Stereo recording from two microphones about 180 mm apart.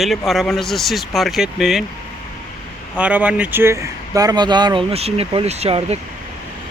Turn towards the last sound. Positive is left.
turn(degrees=-35)  # may be behind; listen again after turning